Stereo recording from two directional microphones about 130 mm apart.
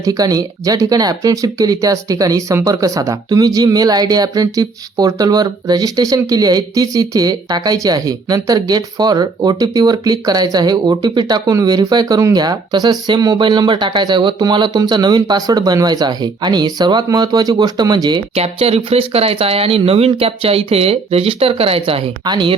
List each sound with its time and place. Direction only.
0.0 s speech: 30° right (ahead or behind)
18.3 s speech: 50° right (ahead or behind)
22.2 s a woman's voice: 35° right (ahead or behind)